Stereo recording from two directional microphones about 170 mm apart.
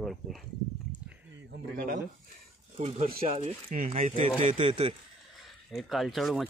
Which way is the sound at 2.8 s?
40° right (ahead or behind).